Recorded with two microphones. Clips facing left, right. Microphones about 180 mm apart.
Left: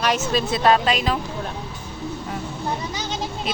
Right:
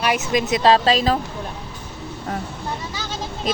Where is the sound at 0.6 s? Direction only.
30° right (ahead or behind).